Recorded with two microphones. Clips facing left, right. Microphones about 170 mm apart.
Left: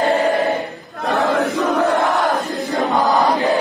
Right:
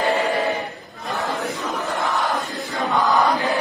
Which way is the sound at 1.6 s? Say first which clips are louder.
Left 10 dB; 70° left (ahead or behind).